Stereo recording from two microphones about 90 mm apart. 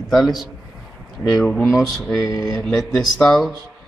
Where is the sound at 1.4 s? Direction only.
Centre (ahead or behind).